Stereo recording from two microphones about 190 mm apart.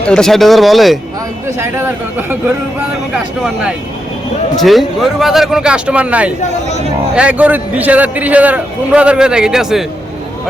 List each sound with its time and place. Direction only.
0.1 s speech: centre (ahead or behind)
1.5 s a man's voice: 15° right (ahead or behind)
3.4 s speech: 5° right (ahead or behind)
6.4 s speech: 35° left (ahead or behind)
7.2 s a man's voice: 5° right (ahead or behind)